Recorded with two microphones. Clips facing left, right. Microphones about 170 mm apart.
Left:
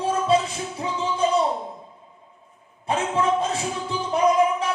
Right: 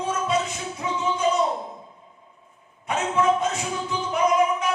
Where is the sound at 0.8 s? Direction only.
30° left (ahead or behind).